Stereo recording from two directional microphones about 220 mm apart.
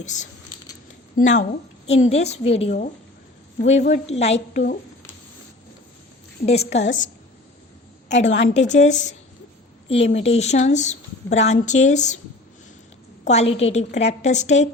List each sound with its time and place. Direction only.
0.0 s a woman's voice: 35° left (ahead or behind)
4.4 s a woman's voice: 45° left (ahead or behind)
6.4 s a woman's voice: 30° left (ahead or behind)
8.3 s a woman's voice: 55° left (ahead or behind)
8.9 s a woman's voice: 30° left (ahead or behind)
13.2 s a woman's voice: 30° left (ahead or behind)